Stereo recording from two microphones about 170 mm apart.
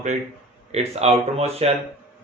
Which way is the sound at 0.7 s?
35° right (ahead or behind).